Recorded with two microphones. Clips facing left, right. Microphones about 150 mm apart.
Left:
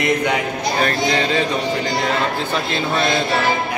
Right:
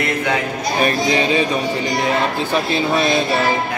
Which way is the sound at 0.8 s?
15° right (ahead or behind).